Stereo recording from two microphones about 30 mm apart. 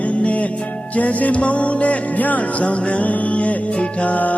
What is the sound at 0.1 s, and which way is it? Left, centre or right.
Music, left.